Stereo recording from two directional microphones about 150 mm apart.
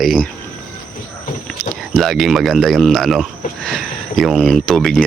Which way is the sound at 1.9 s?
Centre (ahead or behind).